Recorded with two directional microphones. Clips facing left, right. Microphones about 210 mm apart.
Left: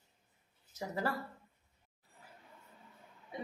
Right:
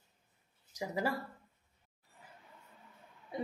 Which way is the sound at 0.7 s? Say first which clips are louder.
Right 2 dB; 15° right (ahead or behind).